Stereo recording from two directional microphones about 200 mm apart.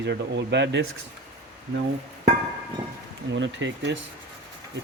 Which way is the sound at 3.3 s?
65° right (ahead or behind).